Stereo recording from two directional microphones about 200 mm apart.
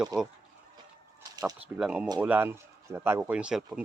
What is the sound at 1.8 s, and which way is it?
Speech, 5° right (ahead or behind).